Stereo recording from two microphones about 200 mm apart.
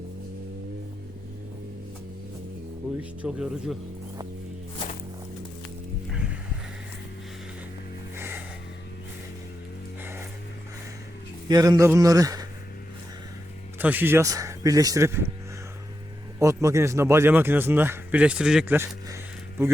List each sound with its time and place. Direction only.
3.0 s speech: 5° right (ahead or behind)
6.1 s music: 5° right (ahead or behind)
8.1 s a sound: 10° right (ahead or behind)
10.0 s music: 10° right (ahead or behind)
11.4 s speech: 20° right (ahead or behind)
13.7 s speech: 10° right (ahead or behind)
16.4 s a man's voice: 15° right (ahead or behind)